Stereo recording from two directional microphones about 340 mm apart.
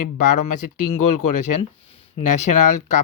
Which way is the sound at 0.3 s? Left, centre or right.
Left.